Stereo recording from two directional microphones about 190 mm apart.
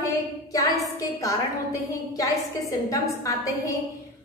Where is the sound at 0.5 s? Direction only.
20° left (ahead or behind).